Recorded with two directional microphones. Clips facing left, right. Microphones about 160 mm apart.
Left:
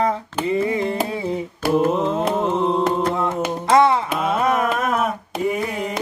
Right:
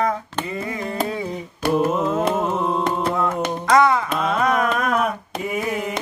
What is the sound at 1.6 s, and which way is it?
Mantra, 5° left (ahead or behind).